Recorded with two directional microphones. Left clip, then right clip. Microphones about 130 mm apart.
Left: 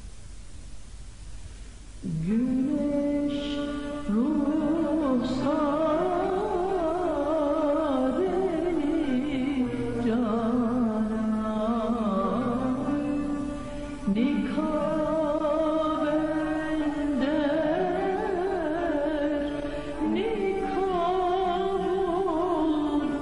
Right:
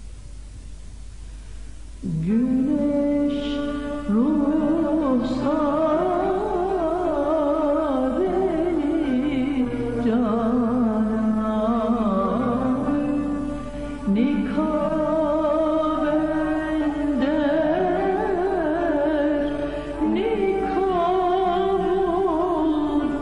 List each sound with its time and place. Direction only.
2.2 s music: 30° right (ahead or behind)